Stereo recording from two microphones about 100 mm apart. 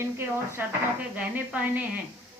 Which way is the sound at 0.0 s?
25° right (ahead or behind).